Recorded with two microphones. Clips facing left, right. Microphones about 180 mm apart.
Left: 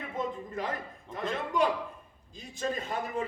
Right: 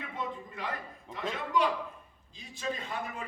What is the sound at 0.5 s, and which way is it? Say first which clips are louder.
A man's voice: left 4 dB; 45° left (ahead or behind).